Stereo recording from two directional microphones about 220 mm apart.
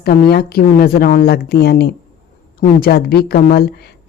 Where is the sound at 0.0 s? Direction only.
45° left (ahead or behind).